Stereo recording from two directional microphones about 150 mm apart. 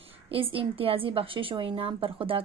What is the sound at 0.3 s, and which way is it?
A woman's voice, 35° right (ahead or behind).